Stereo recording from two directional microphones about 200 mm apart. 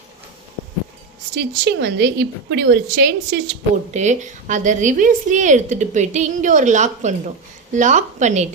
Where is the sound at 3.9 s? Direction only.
35° right (ahead or behind).